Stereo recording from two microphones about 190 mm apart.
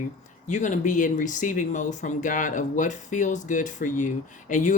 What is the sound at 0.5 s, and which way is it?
Speech, 40° left (ahead or behind).